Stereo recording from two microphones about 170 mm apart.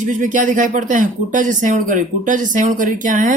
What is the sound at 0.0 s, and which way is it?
Speech, 50° right (ahead or behind).